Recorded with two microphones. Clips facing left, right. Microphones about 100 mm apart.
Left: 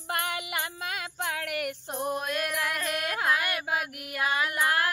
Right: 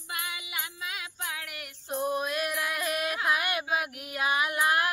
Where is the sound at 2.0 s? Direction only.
5° right (ahead or behind).